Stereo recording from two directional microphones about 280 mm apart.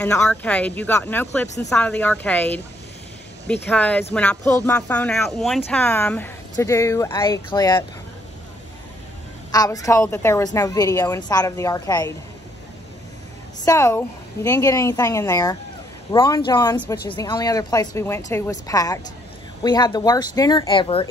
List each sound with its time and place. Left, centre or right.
0.0 s a woman's voice: centre
3.6 s a woman's voice: centre
9.5 s a woman's voice: centre
13.7 s a woman's voice: centre